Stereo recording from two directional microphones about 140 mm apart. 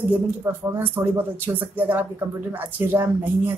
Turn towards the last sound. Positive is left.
turn(degrees=-15)  # may be behind; listen again after turning